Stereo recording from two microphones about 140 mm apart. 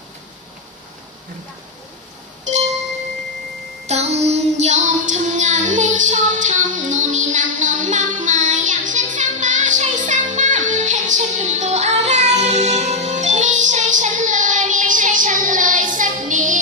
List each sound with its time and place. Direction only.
2.4 s music: 55° right (ahead or behind)
3.8 s child singing: 50° right (ahead or behind)
8.2 s music: 65° right (ahead or behind)